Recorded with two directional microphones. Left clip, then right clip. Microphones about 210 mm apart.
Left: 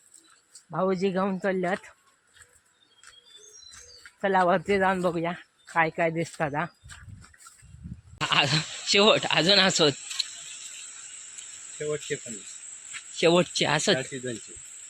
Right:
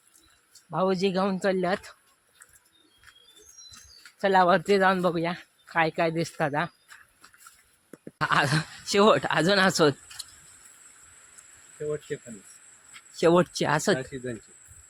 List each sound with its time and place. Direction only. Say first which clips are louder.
0.7 s speech: right 1 dB; 5° right (ahead or behind)
4.2 s speech: right 2 dB; 15° right (ahead or behind)
8.2 s speech: even; 20° right (ahead or behind)
11.9 s speech: left 1 dB; 30° left (ahead or behind)
13.2 s speech: even; 10° right (ahead or behind)